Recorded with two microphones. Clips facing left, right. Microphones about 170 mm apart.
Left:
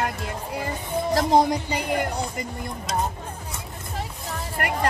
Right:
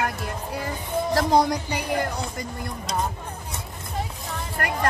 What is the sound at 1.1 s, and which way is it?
Speech, 20° left (ahead or behind).